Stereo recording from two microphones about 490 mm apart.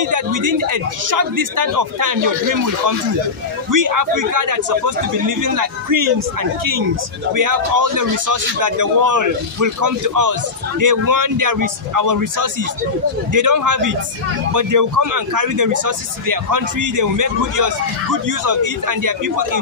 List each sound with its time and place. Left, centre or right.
0.0 s a man's voice: right
3.7 s a man's voice: right
7.3 s a man's voice: right